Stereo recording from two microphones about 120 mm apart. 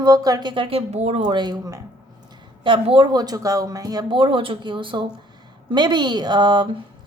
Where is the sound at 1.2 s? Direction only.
40° right (ahead or behind).